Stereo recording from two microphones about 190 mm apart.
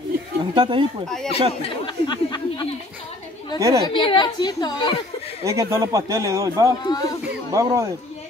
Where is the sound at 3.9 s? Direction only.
25° left (ahead or behind).